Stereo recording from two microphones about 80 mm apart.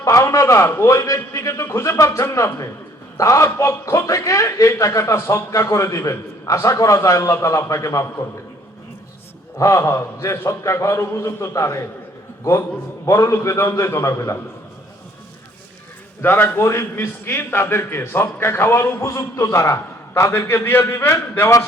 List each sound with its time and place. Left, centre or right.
0.0 s a man's voice: left
9.6 s a man's voice: left
13.1 s a man's voice: left
16.2 s a man's voice: left